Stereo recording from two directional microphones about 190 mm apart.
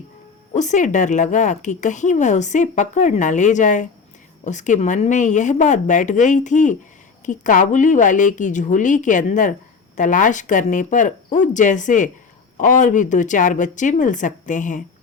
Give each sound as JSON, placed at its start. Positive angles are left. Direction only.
{"t": 0.5, "sound": "a woman's voice", "side_deg": 40}